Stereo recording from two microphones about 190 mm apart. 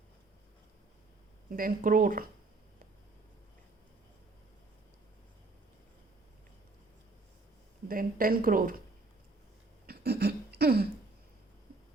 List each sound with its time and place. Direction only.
1.5 s a woman's voice: 50° right (ahead or behind)
7.9 s a woman's voice: 50° right (ahead or behind)
9.8 s a sound: 55° right (ahead or behind)